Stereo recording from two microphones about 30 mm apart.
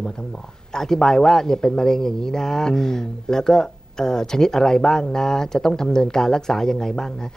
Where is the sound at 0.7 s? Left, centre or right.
Centre.